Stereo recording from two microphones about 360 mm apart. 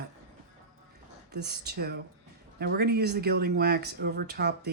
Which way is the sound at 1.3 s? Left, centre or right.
Right.